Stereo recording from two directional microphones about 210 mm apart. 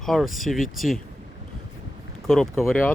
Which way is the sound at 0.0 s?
Centre (ahead or behind).